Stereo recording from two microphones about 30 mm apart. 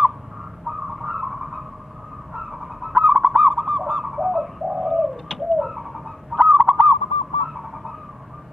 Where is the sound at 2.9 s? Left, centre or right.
Right.